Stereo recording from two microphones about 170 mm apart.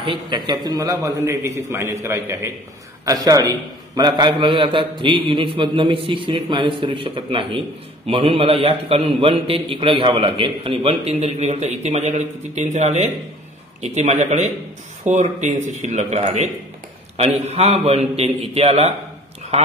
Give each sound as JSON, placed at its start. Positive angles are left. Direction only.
{"t": 0.0, "sound": "a man's voice", "side_deg": -30}
{"t": 17.5, "sound": "a man's voice", "side_deg": -40}